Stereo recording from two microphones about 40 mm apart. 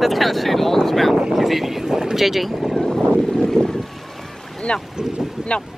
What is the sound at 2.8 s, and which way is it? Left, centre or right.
Boat, centre.